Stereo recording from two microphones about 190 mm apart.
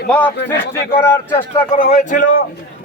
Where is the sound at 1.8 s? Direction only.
35° left (ahead or behind).